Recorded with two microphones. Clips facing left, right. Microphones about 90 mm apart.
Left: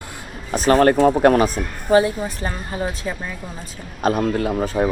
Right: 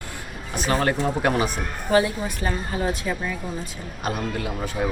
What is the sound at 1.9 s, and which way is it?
A woman's voice, 30° left (ahead or behind).